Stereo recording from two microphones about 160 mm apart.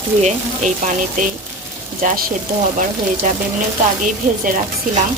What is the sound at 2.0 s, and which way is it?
Speech, 50° right (ahead or behind).